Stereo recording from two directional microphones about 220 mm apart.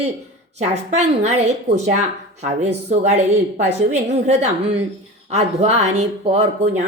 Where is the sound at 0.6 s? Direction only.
30° right (ahead or behind).